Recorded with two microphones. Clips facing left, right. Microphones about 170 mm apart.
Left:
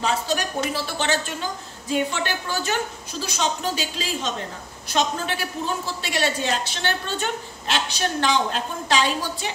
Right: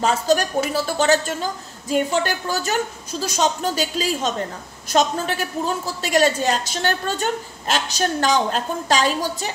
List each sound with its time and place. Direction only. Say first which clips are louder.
0.0 s speech: right 5 dB; 45° right (ahead or behind)